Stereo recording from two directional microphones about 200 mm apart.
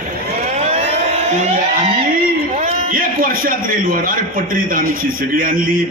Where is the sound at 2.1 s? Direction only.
35° right (ahead or behind).